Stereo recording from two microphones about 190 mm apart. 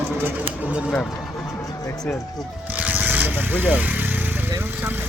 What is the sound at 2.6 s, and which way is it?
Speech, 10° right (ahead or behind).